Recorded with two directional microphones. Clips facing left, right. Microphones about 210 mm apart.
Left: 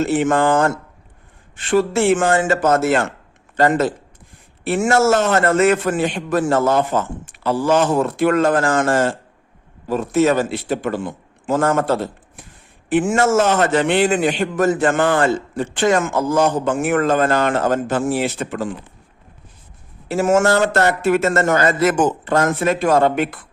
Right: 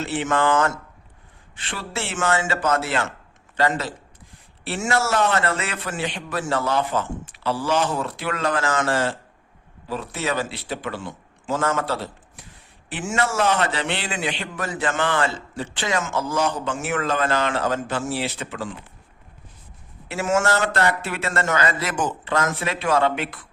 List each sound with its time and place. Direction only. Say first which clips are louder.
0.0 s a man's voice: left 6 dB; 45° left (ahead or behind)
20.1 s a man's voice: left 6 dB; 45° left (ahead or behind)